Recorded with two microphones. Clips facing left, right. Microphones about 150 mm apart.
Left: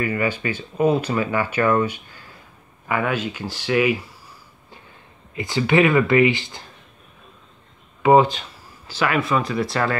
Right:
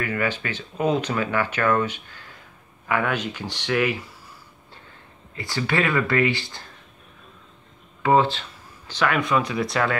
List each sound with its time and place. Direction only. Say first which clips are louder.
0.0 s speech: left 3 dB; 10° left (ahead or behind)
5.3 s speech: left 6 dB; 15° left (ahead or behind)
8.0 s speech: left 4 dB; 15° left (ahead or behind)